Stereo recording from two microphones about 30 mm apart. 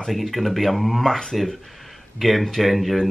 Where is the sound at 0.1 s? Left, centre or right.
Centre.